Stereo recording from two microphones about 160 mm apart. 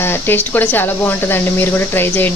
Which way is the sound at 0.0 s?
15° left (ahead or behind).